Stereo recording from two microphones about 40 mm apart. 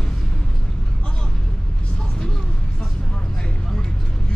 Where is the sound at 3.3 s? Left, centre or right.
Centre.